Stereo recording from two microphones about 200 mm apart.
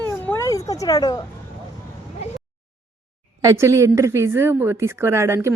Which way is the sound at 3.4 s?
15° right (ahead or behind).